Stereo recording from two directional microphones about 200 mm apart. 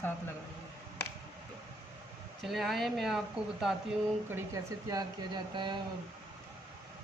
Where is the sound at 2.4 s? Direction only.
Centre (ahead or behind).